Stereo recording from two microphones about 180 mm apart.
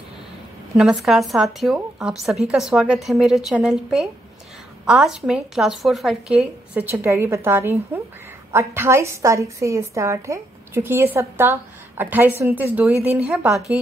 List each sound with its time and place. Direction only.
0.7 s a woman's voice: centre (ahead or behind)